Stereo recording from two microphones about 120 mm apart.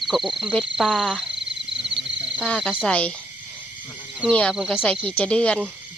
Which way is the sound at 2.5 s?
5° left (ahead or behind).